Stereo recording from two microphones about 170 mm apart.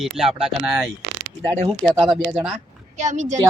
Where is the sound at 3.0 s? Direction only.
45° right (ahead or behind).